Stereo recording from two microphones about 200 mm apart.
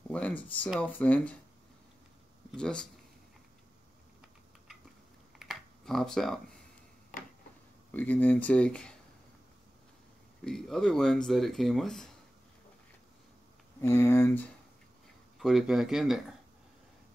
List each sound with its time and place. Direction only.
0.1 s speech: 10° left (ahead or behind)
2.5 s speech: 5° left (ahead or behind)
5.4 s computer keyboard: centre (ahead or behind)
7.1 s a sound: 45° left (ahead or behind)
7.9 s speech: 10° left (ahead or behind)
10.4 s speech: centre (ahead or behind)
13.7 s speech: 15° left (ahead or behind)
15.3 s speech: centre (ahead or behind)